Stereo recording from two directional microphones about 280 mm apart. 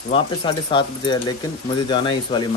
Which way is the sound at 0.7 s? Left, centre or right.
Centre.